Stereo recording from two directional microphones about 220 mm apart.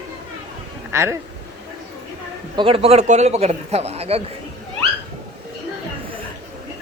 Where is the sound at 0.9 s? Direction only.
10° right (ahead or behind).